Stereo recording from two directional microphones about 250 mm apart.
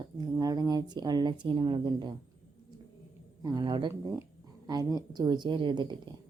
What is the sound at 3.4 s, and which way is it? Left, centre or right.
Speech, centre.